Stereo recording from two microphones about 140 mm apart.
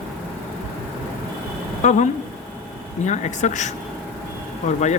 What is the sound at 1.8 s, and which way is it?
Speech, 60° left (ahead or behind).